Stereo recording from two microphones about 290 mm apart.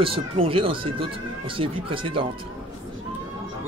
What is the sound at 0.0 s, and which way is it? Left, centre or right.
A man's voice, centre.